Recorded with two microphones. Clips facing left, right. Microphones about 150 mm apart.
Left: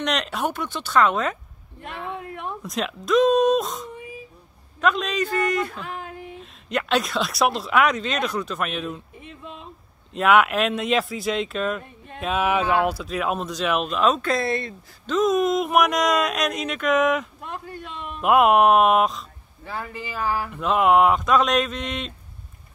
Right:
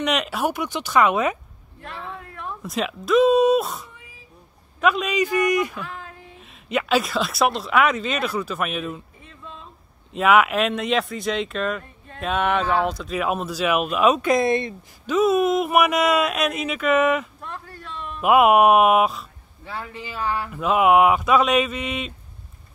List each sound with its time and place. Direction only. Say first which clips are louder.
0.0 s speech: right 2 dB; 5° right (ahead or behind)
2.0 s a sound: left 5 dB; 20° left (ahead or behind)
2.6 s speech: right 5 dB; centre (ahead or behind)
5.8 s a sound: left 1 dB; 25° left (ahead or behind)
6.4 s speech: right 3 dB; 5° right (ahead or behind)
10.1 s speech: right 1 dB; centre (ahead or behind); by 15.1 s 20° right (ahead or behind)
15.1 s speech: right 2 dB; 5° right (ahead or behind)
17.4 s a sound: left 3 dB; 15° left (ahead or behind)
18.2 s speech: right 1 dB; 5° right (ahead or behind)